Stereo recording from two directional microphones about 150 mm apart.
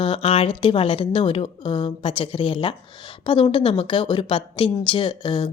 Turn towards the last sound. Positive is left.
turn(degrees=35)  # may be behind; listen again after turning